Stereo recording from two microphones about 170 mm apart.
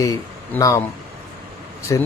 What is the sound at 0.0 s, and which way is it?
Speech, 20° left (ahead or behind).